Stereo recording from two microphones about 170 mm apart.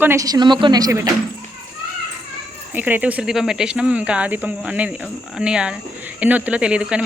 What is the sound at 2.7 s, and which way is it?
Speech, 10° right (ahead or behind).